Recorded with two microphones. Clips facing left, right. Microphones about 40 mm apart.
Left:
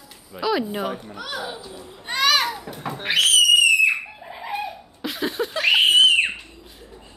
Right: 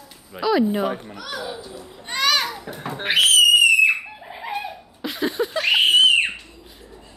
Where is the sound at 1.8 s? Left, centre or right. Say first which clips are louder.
Left 2 dB; centre.